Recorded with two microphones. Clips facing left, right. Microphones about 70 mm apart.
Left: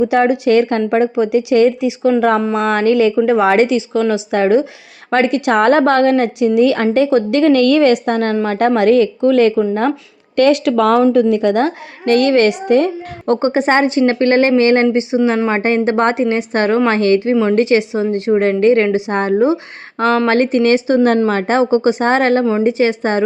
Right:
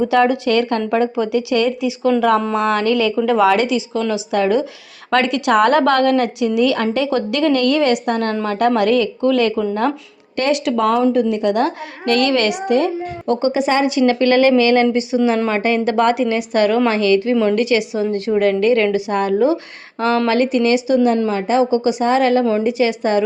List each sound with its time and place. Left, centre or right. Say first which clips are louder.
0.0 s a woman's voice: left 2 dB; centre
3.5 s a woman's voice: left 4 dB; left
7.7 s a woman's voice: left 5 dB; left
8.0 s a woman's voice: left 3 dB; left
10.3 s speech: left 6 dB; left
11.5 s a woman's voice: left 2 dB; left
12.6 s a woman's voice: left 3 dB; left
14.9 s a woman's voice: left 2 dB; left
20.1 s a woman's voice: left 2 dB; left
21.2 s a woman's voice: left 2 dB; left
22.4 s a woman's voice: left 2 dB; left
22.8 s a woman's voice: left 1 dB; left